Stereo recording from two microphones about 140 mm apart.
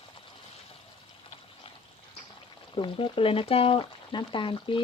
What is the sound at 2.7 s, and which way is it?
Speech, 40° left (ahead or behind).